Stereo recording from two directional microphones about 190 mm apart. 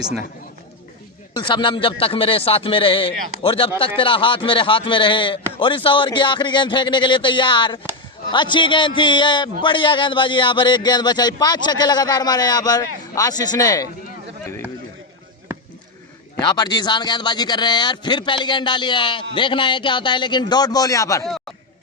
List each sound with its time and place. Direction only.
1.3 s speech: 25° left (ahead or behind)
16.4 s speech: 20° left (ahead or behind)